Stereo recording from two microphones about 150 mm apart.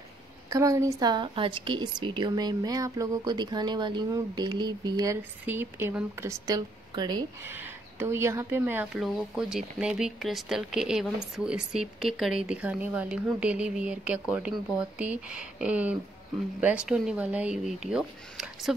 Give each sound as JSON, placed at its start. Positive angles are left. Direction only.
{"t": 0.5, "sound": "a woman's voice", "side_deg": -20}
{"t": 5.4, "sound": "a woman's voice", "side_deg": -15}
{"t": 7.4, "sound": "speech", "side_deg": -15}
{"t": 8.9, "sound": "speech", "side_deg": 0}